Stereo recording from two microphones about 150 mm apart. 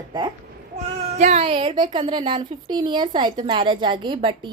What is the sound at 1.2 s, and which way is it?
A woman's voice, 45° right (ahead or behind).